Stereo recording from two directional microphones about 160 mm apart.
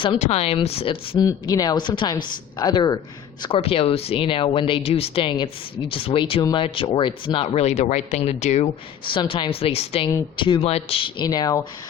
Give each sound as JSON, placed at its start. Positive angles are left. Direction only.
{"t": 0.2, "sound": "speech", "side_deg": 40}
{"t": 1.3, "sound": "a woman's voice", "side_deg": 25}
{"t": 3.4, "sound": "a woman's voice", "side_deg": 35}